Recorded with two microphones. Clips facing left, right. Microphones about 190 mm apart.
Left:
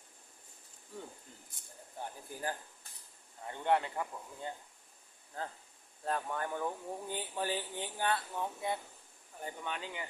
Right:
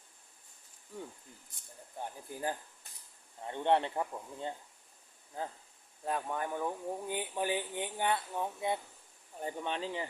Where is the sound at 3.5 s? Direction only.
25° right (ahead or behind).